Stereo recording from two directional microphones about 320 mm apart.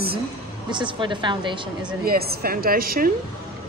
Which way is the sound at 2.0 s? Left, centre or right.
Right.